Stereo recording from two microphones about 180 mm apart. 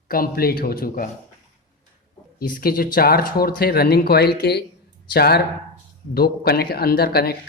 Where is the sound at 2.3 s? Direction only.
50° left (ahead or behind).